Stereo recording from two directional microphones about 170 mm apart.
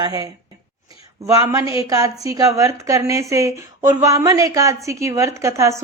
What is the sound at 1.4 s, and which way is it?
A woman's voice, 20° right (ahead or behind).